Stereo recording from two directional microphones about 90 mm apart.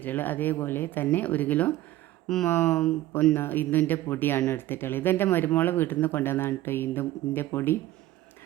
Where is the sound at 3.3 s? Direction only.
20° left (ahead or behind).